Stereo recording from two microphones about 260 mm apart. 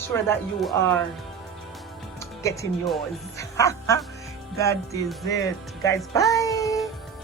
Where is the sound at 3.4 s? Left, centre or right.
Centre.